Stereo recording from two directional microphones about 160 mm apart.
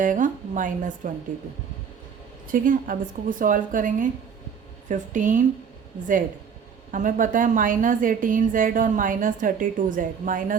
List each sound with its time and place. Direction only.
0.0 s a woman's voice: 55° right (ahead or behind)
2.5 s a woman's voice: 60° right (ahead or behind)
6.9 s a woman's voice: 55° right (ahead or behind)